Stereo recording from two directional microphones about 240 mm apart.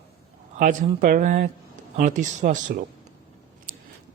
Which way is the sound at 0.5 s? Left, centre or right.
Right.